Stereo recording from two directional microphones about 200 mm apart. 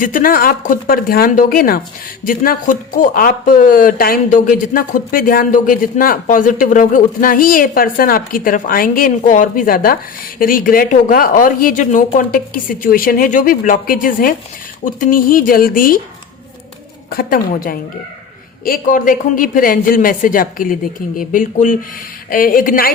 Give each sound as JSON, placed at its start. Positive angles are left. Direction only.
{"t": 0.0, "sound": "speech", "side_deg": 45}
{"t": 17.1, "sound": "speech", "side_deg": 45}